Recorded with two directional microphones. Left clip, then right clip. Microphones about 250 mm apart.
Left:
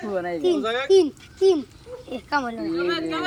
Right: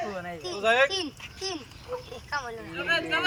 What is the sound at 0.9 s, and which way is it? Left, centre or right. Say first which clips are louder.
Speech: left 15 dB; left.